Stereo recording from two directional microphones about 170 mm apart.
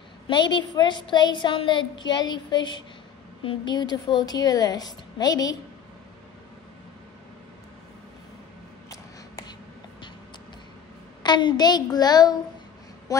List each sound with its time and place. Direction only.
0.3 s a woman's voice: 25° left (ahead or behind)
11.2 s a woman's voice: 25° left (ahead or behind)